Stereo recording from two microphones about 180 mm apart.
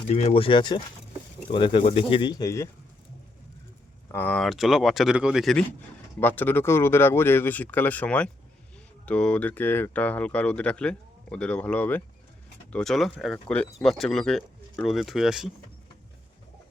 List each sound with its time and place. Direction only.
0.1 s speech: 35° left (ahead or behind); by 2.6 s 20° left (ahead or behind)
4.1 s speech: 10° left (ahead or behind)